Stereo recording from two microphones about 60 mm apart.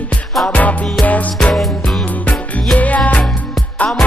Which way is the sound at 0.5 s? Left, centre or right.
Left.